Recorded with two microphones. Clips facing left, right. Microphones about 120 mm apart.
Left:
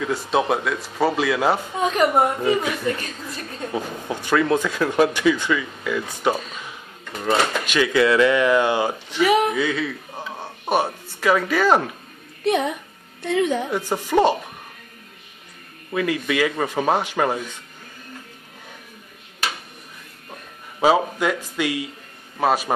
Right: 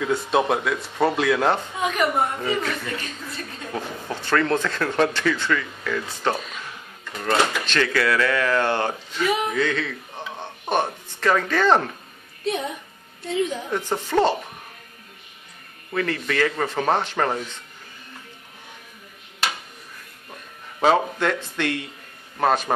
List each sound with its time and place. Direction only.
0.0 s speech: centre (ahead or behind)
1.8 s a woman's voice: 35° left (ahead or behind)
2.4 s speech: 10° left (ahead or behind)
3.7 s speech: 15° left (ahead or behind)
9.1 s speech: 80° left
9.6 s speech: 10° left (ahead or behind)
12.4 s a woman's voice: 70° left (ahead or behind)
13.7 s speech: 10° left (ahead or behind)
15.9 s speech: 10° left (ahead or behind)
20.8 s speech: 5° left (ahead or behind)